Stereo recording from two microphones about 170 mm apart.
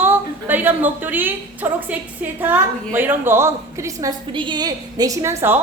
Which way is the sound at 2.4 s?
10° right (ahead or behind).